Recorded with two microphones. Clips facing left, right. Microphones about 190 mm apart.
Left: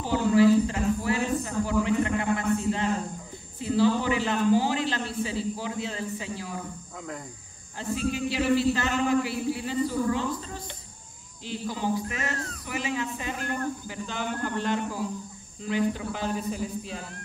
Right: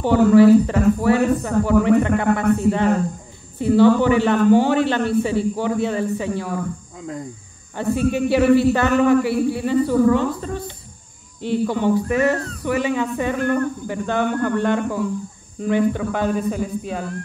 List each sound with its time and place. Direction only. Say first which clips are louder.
0.0 s a sound: right 9 dB; 65° right (ahead or behind)
3.5 s speech: right 9 dB; 65° right (ahead or behind)
7.7 s speech: right 9 dB; 60° right (ahead or behind)